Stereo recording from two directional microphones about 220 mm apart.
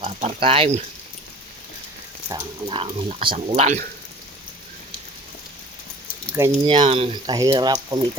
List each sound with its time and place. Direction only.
0.0 s speech: 25° right (ahead or behind)
2.3 s speech: 20° right (ahead or behind)
6.5 s speech: 25° right (ahead or behind)